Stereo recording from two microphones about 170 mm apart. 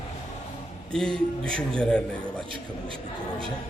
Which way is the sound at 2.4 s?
30° right (ahead or behind).